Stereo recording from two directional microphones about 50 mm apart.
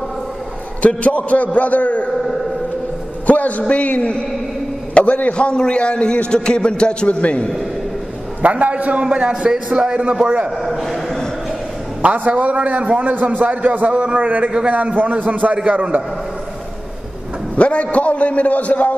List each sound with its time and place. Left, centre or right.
0.8 s a man's voice: left
3.3 s a man's voice: left
8.4 s a man's voice: right
10.6 s a sound: centre
12.0 s a man's voice: right
17.6 s a man's voice: left